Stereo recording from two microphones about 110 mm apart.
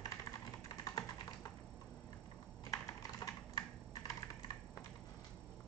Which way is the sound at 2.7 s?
35° left (ahead or behind).